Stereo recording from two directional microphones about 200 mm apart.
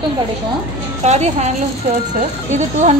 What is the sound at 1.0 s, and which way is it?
A woman's voice, 35° right (ahead or behind).